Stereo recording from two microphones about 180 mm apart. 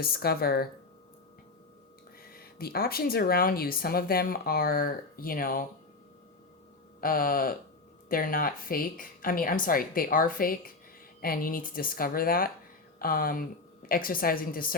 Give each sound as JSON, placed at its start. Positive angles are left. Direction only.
{"t": 0.0, "sound": "speech", "side_deg": 60}
{"t": 2.2, "sound": "speech", "side_deg": 55}
{"t": 7.0, "sound": "speech", "side_deg": 55}